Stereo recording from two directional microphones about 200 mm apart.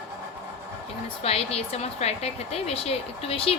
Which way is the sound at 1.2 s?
30° left (ahead or behind).